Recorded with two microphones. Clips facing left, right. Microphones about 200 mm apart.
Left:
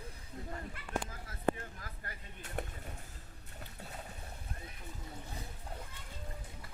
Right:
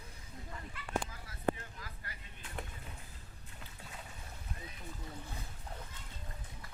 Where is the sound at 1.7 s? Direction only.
50° left (ahead or behind).